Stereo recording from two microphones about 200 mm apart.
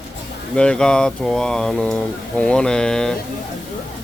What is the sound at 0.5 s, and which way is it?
Speech, 5° left (ahead or behind).